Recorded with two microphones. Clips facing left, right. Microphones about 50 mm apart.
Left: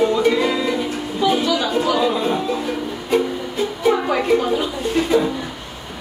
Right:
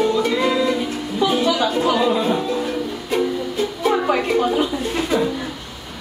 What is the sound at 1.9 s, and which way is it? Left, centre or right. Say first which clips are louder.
Music: right 1 dB; centre.